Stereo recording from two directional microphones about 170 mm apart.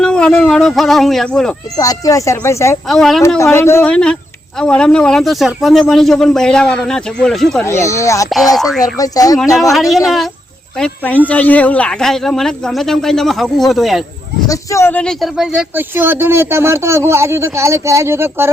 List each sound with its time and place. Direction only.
0.0 s a man's voice: 5° left (ahead or behind)
1.7 s speech: 20° left (ahead or behind)
2.9 s a man's voice: centre (ahead or behind)
3.2 s a man's voice: 15° left (ahead or behind)
7.6 s speech: 15° left (ahead or behind)
9.7 s a man's voice: centre (ahead or behind)
14.4 s speech: 20° left (ahead or behind); by 18.5 s 15° right (ahead or behind)